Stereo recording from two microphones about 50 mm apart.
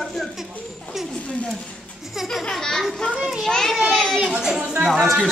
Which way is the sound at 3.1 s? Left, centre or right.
Right.